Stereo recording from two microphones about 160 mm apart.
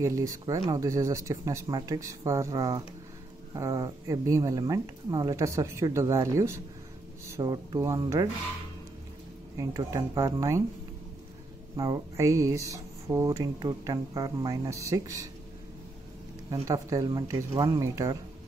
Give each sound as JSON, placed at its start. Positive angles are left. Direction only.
{"t": 0.0, "sound": "speech", "side_deg": -20}
{"t": 9.6, "sound": "speech", "side_deg": -20}
{"t": 11.7, "sound": "speech", "side_deg": -25}
{"t": 16.6, "sound": "speech", "side_deg": -25}